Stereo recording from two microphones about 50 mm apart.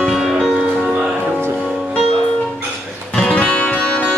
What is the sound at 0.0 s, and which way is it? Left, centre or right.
Music, centre.